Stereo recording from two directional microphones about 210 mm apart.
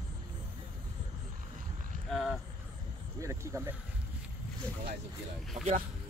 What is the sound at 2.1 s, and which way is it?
Speech, centre (ahead or behind).